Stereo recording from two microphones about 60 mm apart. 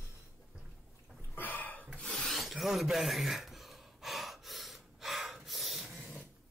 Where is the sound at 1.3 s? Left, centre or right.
Left.